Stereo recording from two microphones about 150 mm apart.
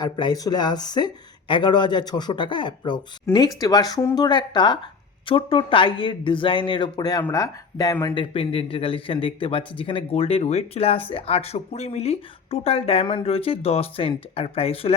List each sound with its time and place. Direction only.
0.0 s speech: 30° left (ahead or behind)
8.1 s speech: 35° left (ahead or behind)